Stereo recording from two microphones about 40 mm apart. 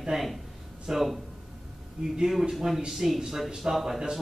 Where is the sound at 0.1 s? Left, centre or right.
Centre.